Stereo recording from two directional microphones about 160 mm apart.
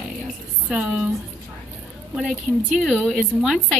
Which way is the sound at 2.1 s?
5° right (ahead or behind).